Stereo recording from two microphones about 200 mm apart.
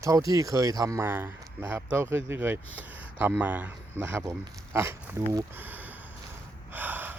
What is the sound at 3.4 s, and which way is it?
Speech, 10° right (ahead or behind).